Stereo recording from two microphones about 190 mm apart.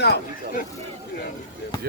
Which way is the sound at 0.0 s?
60° left (ahead or behind).